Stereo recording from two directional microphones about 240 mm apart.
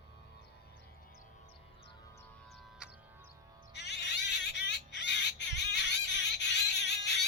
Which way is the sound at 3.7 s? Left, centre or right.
Left.